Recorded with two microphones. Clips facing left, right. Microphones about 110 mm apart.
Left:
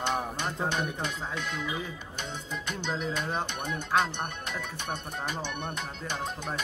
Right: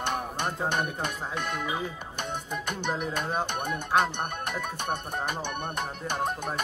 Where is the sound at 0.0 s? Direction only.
55° right (ahead or behind).